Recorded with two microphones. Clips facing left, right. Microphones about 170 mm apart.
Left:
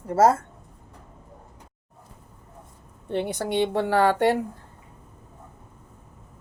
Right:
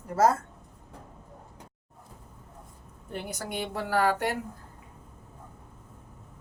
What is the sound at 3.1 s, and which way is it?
A woman's voice, 25° left (ahead or behind).